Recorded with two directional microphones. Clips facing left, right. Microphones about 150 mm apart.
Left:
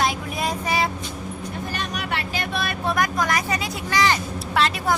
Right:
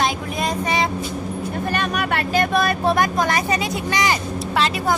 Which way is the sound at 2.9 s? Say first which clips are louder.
Right 3 dB; 30° right (ahead or behind).